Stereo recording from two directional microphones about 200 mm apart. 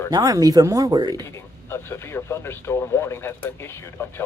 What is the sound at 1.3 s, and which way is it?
Speech, 10° left (ahead or behind).